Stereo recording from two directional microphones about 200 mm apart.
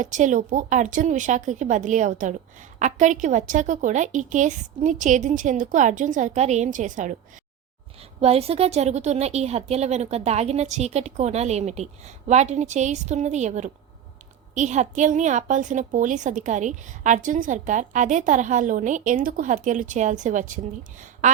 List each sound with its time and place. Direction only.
0.0 s a woman's voice: 40° right (ahead or behind)
8.2 s a woman's voice: 30° right (ahead or behind)